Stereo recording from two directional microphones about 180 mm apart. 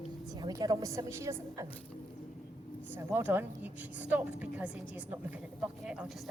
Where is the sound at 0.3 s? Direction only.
20° right (ahead or behind).